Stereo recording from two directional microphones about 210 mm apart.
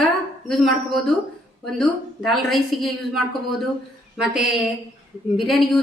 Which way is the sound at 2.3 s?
Centre (ahead or behind).